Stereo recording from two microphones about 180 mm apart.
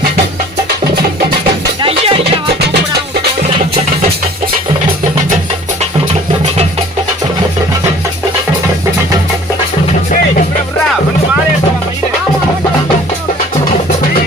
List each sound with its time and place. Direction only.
1.8 s music: 30° right (ahead or behind)